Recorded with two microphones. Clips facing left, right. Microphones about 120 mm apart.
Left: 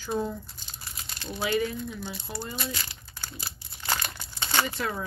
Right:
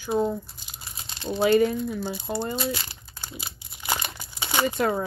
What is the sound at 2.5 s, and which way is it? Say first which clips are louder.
Crumpling: right 6 dB; 25° right (ahead or behind).